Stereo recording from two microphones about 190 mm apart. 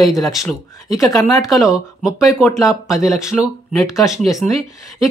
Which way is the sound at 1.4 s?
Centre (ahead or behind).